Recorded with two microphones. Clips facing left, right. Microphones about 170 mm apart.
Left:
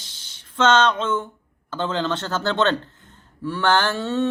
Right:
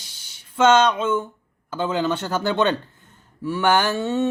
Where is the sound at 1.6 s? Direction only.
10° right (ahead or behind).